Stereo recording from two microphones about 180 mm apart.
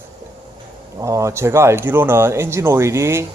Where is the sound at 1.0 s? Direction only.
15° right (ahead or behind).